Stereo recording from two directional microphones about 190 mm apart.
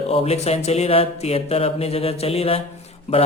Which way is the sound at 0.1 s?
30° left (ahead or behind).